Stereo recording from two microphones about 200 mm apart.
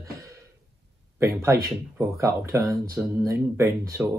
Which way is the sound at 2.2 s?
15° right (ahead or behind).